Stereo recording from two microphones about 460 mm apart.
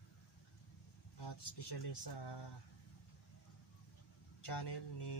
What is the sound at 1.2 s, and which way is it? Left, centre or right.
Speech, left.